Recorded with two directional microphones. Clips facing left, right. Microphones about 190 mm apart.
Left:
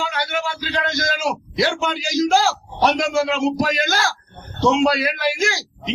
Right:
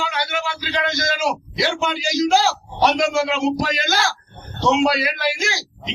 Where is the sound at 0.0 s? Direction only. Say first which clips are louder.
Left 1 dB; 45° left (ahead or behind).